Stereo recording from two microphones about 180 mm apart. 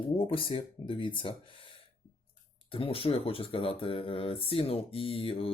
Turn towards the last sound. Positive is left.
turn(degrees=30)  # may be behind; listen again after turning